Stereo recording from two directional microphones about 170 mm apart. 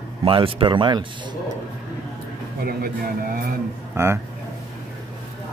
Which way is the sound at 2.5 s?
60° right (ahead or behind).